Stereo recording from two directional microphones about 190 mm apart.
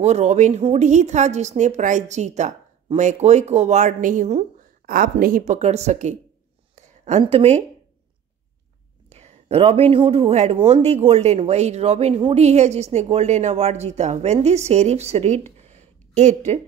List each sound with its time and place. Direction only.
0.0 s a man's voice: 35° right (ahead or behind)
6.7 s a sound: 35° right (ahead or behind)
9.1 s a man's voice: 35° right (ahead or behind)